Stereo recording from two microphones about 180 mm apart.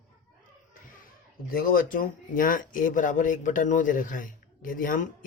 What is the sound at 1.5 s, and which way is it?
Speech, 55° left (ahead or behind).